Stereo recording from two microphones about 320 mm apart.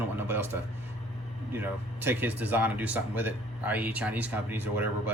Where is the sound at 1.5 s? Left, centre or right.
Centre.